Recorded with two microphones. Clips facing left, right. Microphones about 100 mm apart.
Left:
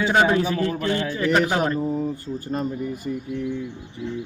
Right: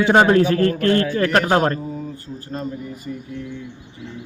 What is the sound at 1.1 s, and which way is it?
Speech, 65° right (ahead or behind).